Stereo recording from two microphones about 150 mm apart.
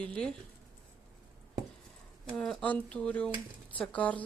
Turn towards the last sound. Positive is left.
turn(degrees=10)  # may be behind; listen again after turning